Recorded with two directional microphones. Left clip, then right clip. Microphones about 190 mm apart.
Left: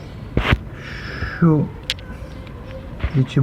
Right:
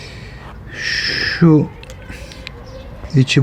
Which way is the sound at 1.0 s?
45° right (ahead or behind).